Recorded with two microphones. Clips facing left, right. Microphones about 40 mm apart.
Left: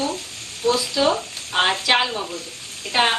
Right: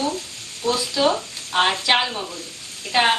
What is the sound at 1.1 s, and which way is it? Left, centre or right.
Speech, centre.